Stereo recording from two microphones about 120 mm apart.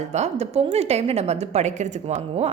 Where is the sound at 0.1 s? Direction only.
65° right (ahead or behind).